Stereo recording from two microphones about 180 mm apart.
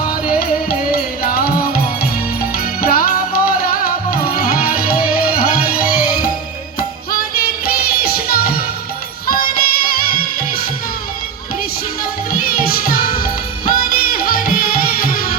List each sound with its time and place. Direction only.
0.1 s music: 55° left (ahead or behind)
12.3 s music: 55° left (ahead or behind)